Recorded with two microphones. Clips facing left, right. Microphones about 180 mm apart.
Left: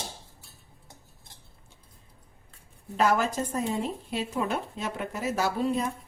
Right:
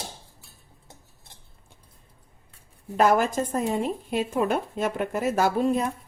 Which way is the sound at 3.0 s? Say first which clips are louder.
Right 4 dB; 50° right (ahead or behind).